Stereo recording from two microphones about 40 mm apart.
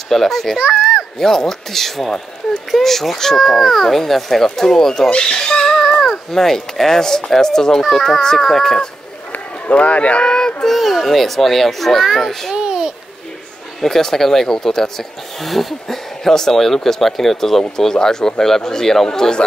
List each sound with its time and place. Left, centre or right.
0.1 s speech: centre
0.6 s a child's voice: centre
1.1 s speech: centre
5.2 s a sound: centre
5.8 s speech: centre
9.3 s run: left
10.2 s child singing: centre
10.7 s a child's voice: centre
12.0 s speech: centre
12.3 s speech: centre
12.5 s babbling: centre
13.7 s speech: centre